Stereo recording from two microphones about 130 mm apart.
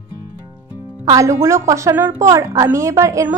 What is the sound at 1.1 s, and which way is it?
Speech, 25° right (ahead or behind).